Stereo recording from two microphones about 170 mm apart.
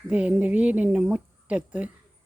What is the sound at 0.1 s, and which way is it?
Speech, 10° right (ahead or behind).